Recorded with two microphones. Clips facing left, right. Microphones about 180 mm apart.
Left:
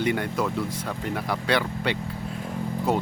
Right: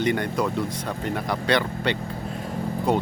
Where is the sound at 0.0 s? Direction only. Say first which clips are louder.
Right 2 dB; 5° left (ahead or behind).